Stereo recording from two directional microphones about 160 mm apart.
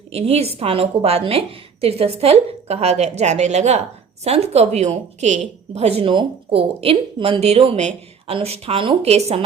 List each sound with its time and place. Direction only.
0.1 s a woman's voice: 40° right (ahead or behind)